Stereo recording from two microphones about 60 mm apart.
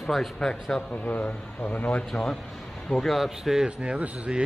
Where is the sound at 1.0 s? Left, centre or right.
Left.